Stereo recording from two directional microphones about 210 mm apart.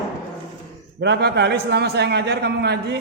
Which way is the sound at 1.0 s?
55° right (ahead or behind).